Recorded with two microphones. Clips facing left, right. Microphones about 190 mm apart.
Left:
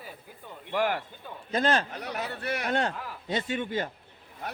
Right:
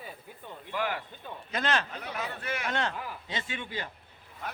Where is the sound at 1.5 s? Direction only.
35° left (ahead or behind).